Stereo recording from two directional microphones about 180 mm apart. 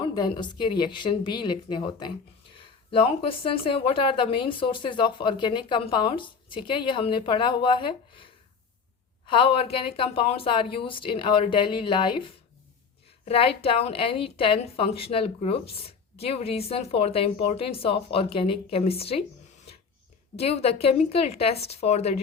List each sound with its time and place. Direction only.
0.0 s a woman's voice: 25° left (ahead or behind)
20.3 s a woman's voice: 35° left (ahead or behind)